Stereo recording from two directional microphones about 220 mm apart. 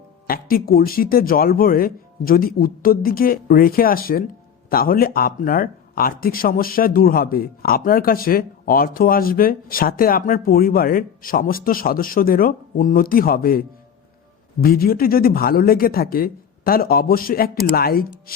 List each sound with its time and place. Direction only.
0.3 s speech: 40° left (ahead or behind)